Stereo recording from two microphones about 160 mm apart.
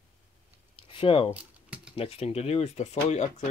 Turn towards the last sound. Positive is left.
turn(degrees=45)  # may be behind; listen again after turning